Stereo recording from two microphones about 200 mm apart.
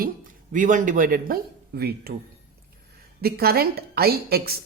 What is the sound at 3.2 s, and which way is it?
A man's voice, 50° right (ahead or behind).